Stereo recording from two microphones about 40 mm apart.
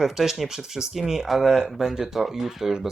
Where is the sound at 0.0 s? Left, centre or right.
Centre.